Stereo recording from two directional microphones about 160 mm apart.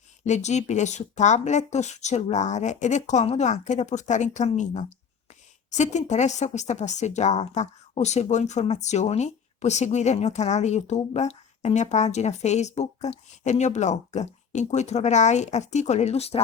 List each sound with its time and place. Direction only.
0.3 s speech: 45° left (ahead or behind)